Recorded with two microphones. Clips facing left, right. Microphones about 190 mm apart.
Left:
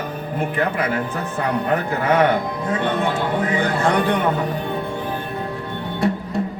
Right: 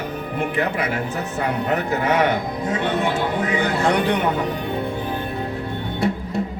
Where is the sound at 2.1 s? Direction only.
55° left (ahead or behind).